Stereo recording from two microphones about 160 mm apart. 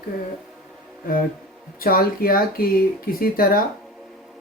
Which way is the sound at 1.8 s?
65° left (ahead or behind).